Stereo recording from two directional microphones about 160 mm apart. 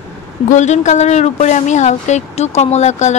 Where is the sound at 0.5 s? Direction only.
50° left (ahead or behind).